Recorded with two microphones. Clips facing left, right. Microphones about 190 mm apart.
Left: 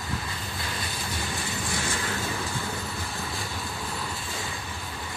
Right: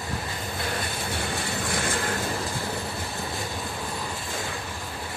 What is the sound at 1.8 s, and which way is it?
Vehicle, 50° right (ahead or behind).